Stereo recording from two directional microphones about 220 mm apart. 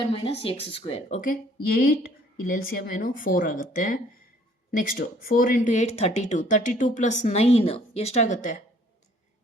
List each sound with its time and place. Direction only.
0.0 s speech: 25° left (ahead or behind)